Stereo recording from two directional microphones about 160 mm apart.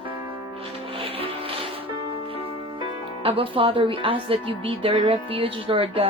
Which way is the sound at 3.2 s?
35° right (ahead or behind).